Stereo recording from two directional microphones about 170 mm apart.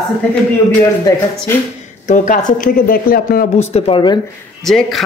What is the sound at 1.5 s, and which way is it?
Speech, 15° left (ahead or behind).